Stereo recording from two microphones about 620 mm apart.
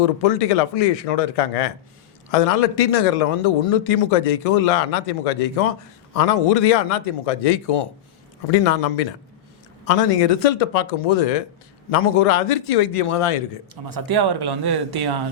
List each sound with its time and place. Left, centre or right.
0.0 s speech: left
13.9 s speech: right